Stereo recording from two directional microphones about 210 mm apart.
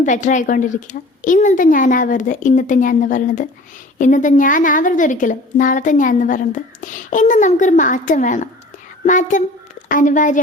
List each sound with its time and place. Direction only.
0.0 s a woman's voice: 35° left (ahead or behind)